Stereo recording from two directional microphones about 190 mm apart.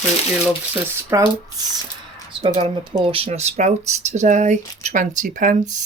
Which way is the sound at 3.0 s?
30° right (ahead or behind).